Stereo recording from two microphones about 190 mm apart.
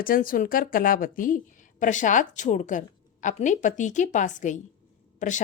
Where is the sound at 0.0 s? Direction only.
50° left (ahead or behind).